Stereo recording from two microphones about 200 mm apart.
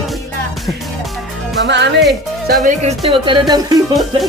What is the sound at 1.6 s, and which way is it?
Speech, 60° right (ahead or behind).